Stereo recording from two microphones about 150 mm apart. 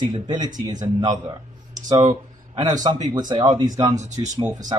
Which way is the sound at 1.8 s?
25° right (ahead or behind).